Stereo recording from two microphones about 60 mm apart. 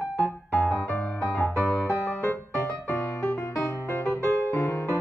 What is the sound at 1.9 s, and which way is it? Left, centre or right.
Music, left.